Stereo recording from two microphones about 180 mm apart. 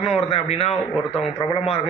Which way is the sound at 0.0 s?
35° left (ahead or behind).